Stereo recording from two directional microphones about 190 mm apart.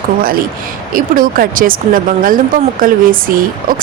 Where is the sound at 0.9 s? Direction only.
50° right (ahead or behind).